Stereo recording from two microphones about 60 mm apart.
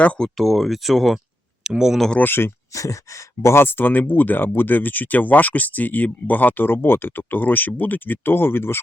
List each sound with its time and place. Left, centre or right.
0.0 s speech: left
0.3 s speech: centre
2.2 s speech: left
2.7 s speech: left